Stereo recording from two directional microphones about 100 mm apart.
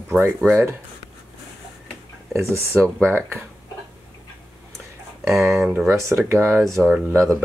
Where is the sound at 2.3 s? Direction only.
25° right (ahead or behind).